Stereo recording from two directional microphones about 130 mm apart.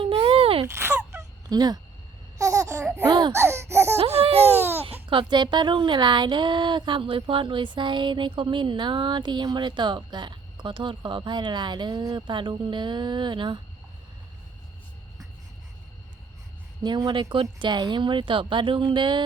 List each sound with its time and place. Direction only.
0.0 s a sound: 45° right (ahead or behind)
0.6 s a sound: 20° right (ahead or behind)
1.5 s speech: 30° right (ahead or behind)
2.4 s laughter: 25° right (ahead or behind)
3.1 s a sound: 35° right (ahead or behind)
3.3 s laughter: 20° right (ahead or behind)
3.9 s laughter: 50° right (ahead or behind)
4.5 s babbling: 15° right (ahead or behind)
5.0 s speech: 40° right (ahead or behind)
16.8 s speech: 35° right (ahead or behind)